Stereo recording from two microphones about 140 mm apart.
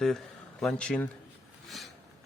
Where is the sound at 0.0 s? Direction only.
5° left (ahead or behind).